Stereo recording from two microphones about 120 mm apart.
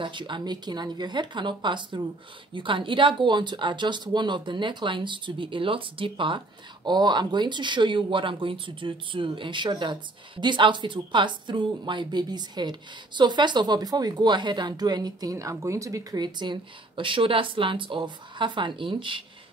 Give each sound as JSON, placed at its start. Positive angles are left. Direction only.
{"t": 0.0, "sound": "speech", "side_deg": -40}